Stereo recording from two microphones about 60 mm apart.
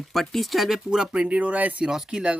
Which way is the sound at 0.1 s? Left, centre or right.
Centre.